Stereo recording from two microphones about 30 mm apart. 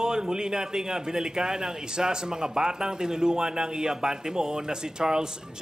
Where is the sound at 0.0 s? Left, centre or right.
Right.